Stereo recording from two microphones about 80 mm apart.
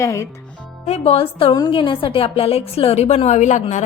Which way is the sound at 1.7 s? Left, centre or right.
Left.